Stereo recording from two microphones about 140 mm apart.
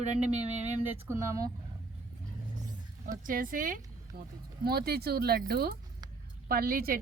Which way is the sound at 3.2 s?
85° right.